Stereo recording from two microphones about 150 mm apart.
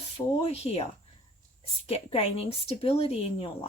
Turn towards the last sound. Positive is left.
turn(degrees=40)  # may be behind; listen again after turning